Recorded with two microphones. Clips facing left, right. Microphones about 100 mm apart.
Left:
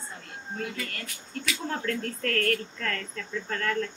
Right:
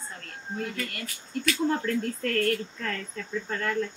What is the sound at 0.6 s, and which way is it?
Speech, centre (ahead or behind).